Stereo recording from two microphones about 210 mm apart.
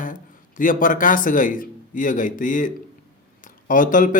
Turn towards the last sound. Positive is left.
turn(degrees=40)  # may be behind; listen again after turning